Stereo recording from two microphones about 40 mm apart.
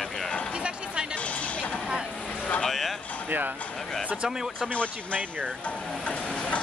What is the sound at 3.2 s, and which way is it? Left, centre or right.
Speech, right.